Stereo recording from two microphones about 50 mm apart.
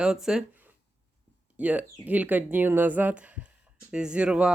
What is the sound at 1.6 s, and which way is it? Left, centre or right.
Speech, right.